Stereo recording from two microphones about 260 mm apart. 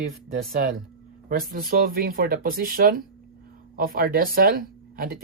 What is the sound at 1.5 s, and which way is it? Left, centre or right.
Speech, right.